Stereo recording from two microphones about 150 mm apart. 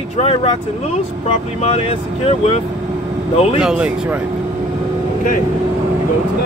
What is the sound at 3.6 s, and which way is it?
Speech, 5° right (ahead or behind).